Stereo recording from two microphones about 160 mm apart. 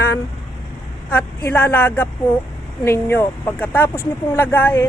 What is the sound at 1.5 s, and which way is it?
Speech, 15° left (ahead or behind).